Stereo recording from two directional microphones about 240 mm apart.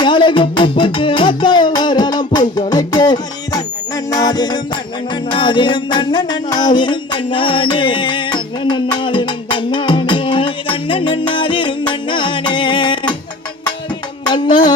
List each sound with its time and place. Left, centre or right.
0.0 s music: centre
14.3 s music: centre